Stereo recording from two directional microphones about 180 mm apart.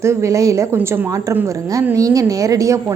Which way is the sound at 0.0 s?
15° right (ahead or behind).